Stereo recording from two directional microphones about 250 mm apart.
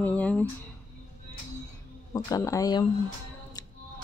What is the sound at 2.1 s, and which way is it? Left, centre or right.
Speech, centre.